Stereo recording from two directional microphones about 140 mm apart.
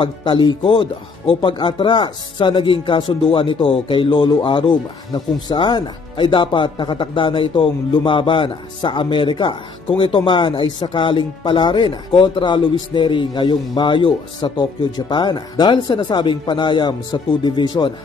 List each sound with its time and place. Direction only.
0.0 s speech: 35° left (ahead or behind)